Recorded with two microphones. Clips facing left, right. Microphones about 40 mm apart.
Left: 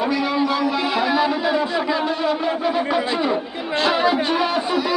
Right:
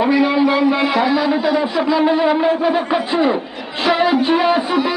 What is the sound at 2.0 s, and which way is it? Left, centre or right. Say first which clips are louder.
Music: right 7 dB; right.